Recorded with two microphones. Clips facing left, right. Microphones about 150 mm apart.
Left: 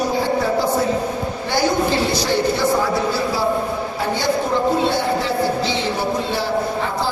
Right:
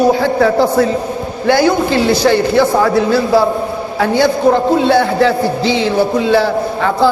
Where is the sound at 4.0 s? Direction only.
80° right.